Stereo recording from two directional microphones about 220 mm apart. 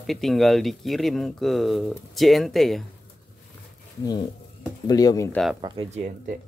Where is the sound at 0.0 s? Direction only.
Centre (ahead or behind).